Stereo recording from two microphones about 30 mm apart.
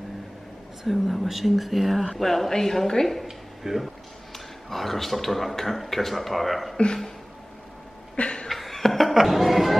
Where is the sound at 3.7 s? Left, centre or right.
Centre.